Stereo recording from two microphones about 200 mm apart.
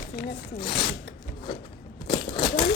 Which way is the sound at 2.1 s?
25° left (ahead or behind).